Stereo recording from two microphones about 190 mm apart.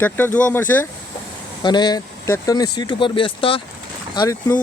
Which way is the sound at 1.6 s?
25° left (ahead or behind).